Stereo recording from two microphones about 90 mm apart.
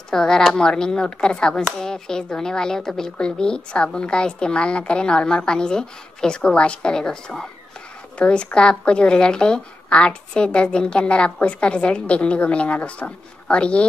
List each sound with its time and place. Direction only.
0.1 s speech: 5° left (ahead or behind)